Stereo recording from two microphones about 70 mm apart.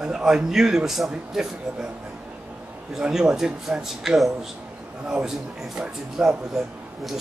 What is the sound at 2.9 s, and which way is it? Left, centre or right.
A man's voice, centre.